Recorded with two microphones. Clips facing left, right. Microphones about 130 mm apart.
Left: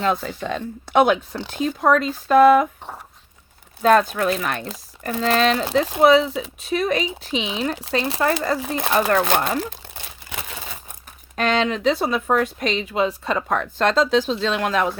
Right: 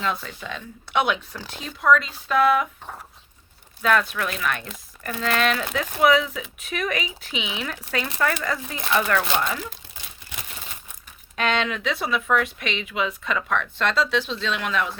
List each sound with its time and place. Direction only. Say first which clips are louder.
0.0 s speech: left 6 dB; 45° left (ahead or behind)
3.8 s speech: left 6 dB; 35° left (ahead or behind)
11.3 s speech: left 4 dB; 40° left (ahead or behind)